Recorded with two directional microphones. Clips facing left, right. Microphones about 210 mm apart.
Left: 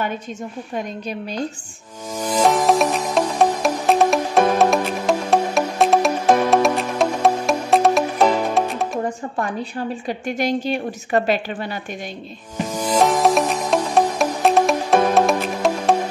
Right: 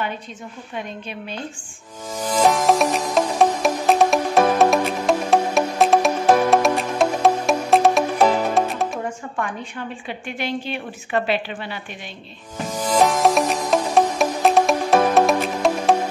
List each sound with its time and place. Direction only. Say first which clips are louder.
0.7 s a woman's voice: left 4 dB; 40° left (ahead or behind)
2.1 s music: left 1 dB; centre (ahead or behind)
9.4 s a woman's voice: left 3 dB; 35° left (ahead or behind)
12.7 s music: left 1 dB; centre (ahead or behind)